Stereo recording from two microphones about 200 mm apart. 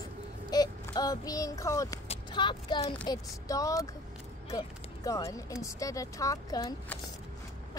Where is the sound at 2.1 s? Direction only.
25° left (ahead or behind).